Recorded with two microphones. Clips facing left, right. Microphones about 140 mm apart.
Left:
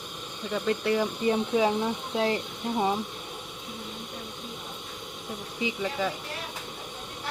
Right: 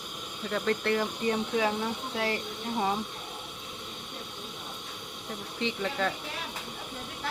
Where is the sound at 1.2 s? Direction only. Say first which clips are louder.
Left 4 dB; 25° left (ahead or behind).